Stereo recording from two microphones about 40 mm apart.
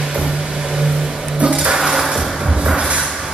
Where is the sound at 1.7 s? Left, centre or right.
Centre.